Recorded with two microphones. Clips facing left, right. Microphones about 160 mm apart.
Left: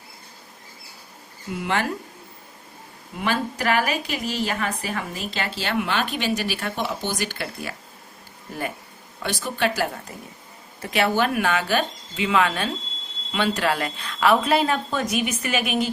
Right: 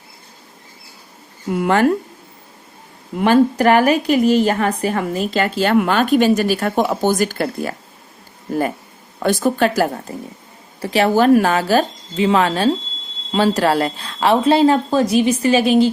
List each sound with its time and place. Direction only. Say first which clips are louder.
1.5 s a woman's voice: right 10 dB; 50° right (ahead or behind)
3.2 s a woman's voice: right 12 dB; 50° right (ahead or behind)
9.2 s a woman's voice: right 9 dB; 45° right (ahead or behind)